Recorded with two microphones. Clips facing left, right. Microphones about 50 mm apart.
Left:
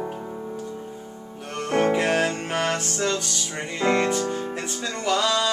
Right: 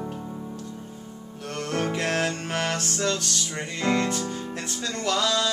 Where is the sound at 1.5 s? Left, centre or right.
Centre.